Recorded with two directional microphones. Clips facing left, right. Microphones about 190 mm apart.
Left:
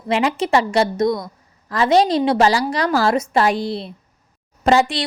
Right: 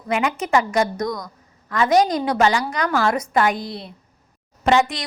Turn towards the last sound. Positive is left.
turn(degrees=35)  # may be behind; listen again after turning